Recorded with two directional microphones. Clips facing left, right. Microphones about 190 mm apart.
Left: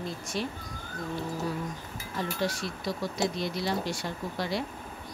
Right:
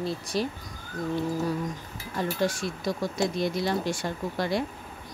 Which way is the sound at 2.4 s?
50° right (ahead or behind).